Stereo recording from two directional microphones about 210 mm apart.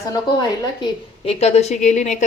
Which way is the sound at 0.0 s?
15° left (ahead or behind).